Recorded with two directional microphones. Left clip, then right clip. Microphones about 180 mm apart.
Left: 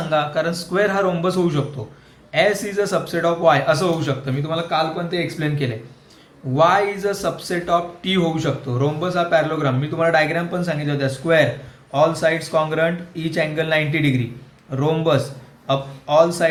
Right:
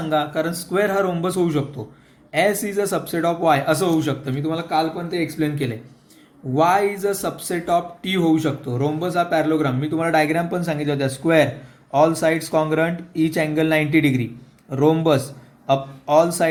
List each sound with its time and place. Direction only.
0.1 s a man's voice: 35° right (ahead or behind)